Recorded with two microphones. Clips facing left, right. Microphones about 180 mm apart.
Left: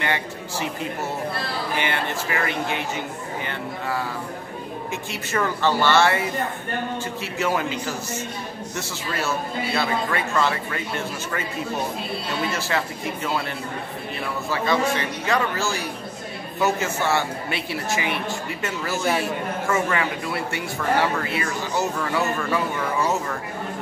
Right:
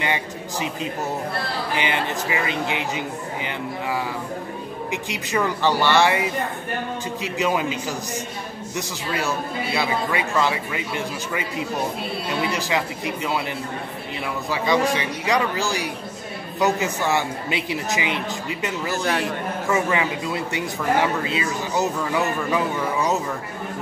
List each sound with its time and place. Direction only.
0.0 s a man's voice: 15° right (ahead or behind)
4.9 s a man's voice: 15° right (ahead or behind)
14.5 s a man's voice: 15° right (ahead or behind)